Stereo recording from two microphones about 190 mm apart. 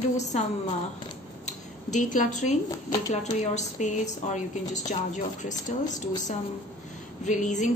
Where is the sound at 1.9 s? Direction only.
40° left (ahead or behind).